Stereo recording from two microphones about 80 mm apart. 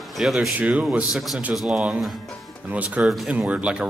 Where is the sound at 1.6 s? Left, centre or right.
Centre.